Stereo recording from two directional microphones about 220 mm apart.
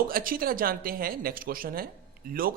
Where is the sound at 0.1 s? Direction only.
40° right (ahead or behind).